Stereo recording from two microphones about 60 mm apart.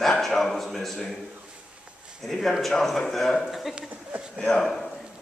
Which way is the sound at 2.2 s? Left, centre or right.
Centre.